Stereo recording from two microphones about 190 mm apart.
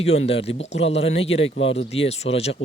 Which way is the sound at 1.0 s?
90° left.